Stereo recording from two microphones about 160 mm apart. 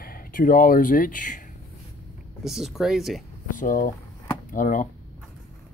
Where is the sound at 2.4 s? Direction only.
Centre (ahead or behind).